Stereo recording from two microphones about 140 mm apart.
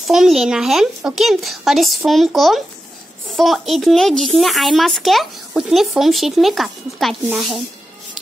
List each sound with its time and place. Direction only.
0.0 s speech: centre (ahead or behind)